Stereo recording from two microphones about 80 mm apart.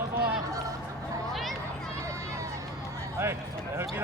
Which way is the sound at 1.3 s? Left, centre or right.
Centre.